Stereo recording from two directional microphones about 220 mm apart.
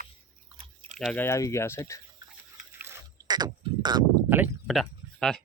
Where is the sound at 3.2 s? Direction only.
20° right (ahead or behind).